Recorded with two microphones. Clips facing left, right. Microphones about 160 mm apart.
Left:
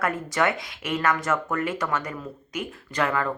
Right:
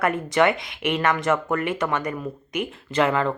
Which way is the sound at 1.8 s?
15° right (ahead or behind).